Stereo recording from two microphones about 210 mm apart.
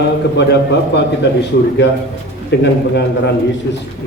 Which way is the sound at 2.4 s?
55° left (ahead or behind).